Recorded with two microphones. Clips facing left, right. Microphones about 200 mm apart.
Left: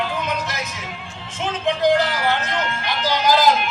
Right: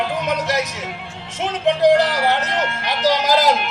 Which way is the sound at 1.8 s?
70° right (ahead or behind).